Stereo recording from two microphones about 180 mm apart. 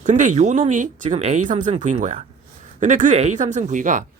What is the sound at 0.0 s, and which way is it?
Speech, 45° right (ahead or behind).